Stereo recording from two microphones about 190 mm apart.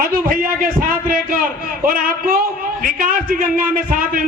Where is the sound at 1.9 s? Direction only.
50° right (ahead or behind).